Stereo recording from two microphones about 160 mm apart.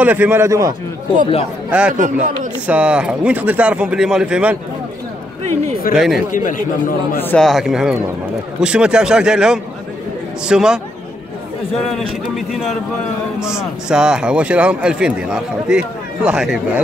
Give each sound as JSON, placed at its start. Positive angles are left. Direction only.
{"t": 0.0, "sound": "speech", "side_deg": -10}
{"t": 1.7, "sound": "speech", "side_deg": -10}
{"t": 2.0, "sound": "speech", "side_deg": -55}
{"t": 2.6, "sound": "speech", "side_deg": -5}
{"t": 5.9, "sound": "a man's voice", "side_deg": 0}
{"t": 6.3, "sound": "a man's voice", "side_deg": 55}
{"t": 7.2, "sound": "a man's voice", "side_deg": 10}
{"t": 7.4, "sound": "a man's voice", "side_deg": 0}